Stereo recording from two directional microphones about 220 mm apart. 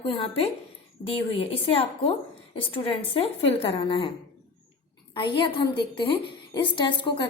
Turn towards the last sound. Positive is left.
turn(degrees=20)  # may be behind; listen again after turning